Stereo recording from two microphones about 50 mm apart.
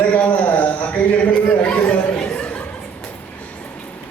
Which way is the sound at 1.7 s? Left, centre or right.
Left.